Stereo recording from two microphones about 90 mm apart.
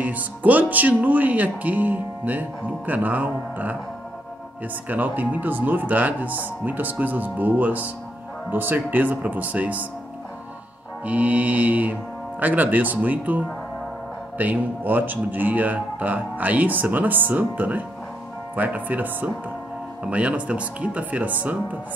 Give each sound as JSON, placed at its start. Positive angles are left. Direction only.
{"t": 0.0, "sound": "speech", "side_deg": -15}
{"t": 4.8, "sound": "speech", "side_deg": -20}
{"t": 11.1, "sound": "speech", "side_deg": -15}
{"t": 14.4, "sound": "speech", "side_deg": -20}